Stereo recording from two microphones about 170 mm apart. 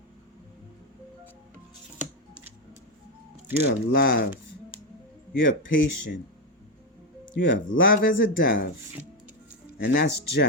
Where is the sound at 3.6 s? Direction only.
70° left (ahead or behind).